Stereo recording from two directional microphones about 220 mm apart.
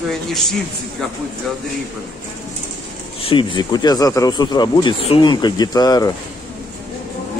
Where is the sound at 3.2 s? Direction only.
25° left (ahead or behind).